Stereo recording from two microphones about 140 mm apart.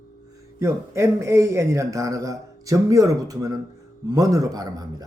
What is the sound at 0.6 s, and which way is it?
A man's voice, 20° right (ahead or behind).